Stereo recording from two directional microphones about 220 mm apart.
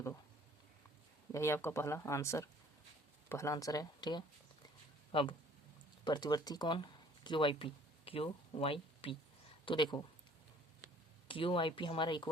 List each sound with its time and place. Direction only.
1.3 s speech: 10° left (ahead or behind)
11.3 s speech: 25° left (ahead or behind)